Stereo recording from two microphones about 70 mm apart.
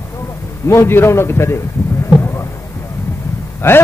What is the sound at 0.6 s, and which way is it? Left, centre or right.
Speech, left.